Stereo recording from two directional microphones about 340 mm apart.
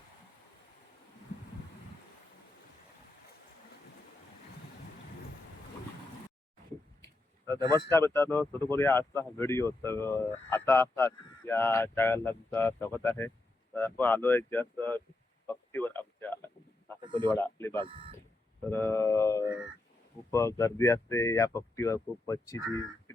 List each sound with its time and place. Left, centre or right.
7.6 s speech: centre
7.9 s speech: centre
15.4 s a sound: centre
17.0 s a sound: centre
17.3 s speech: centre
17.8 s speech: centre
18.7 s speech: centre
19.4 s speech: centre
20.3 s speech: centre